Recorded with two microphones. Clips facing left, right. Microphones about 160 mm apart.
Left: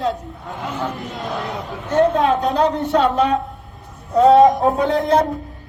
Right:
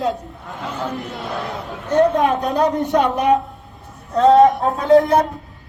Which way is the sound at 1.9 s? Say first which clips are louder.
Even; 15° right (ahead or behind).